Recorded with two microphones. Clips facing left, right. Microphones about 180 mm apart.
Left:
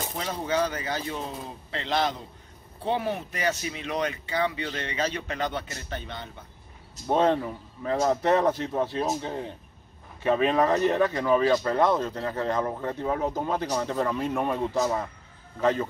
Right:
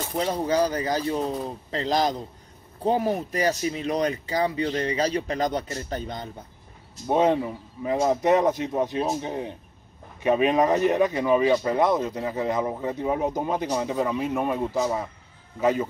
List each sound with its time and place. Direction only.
0.2 s speech: 35° right (ahead or behind)
7.1 s speech: 15° right (ahead or behind)